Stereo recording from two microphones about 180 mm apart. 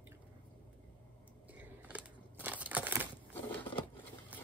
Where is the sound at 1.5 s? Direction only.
10° right (ahead or behind).